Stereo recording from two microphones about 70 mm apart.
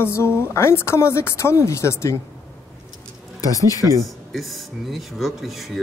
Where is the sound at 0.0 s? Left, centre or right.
Left.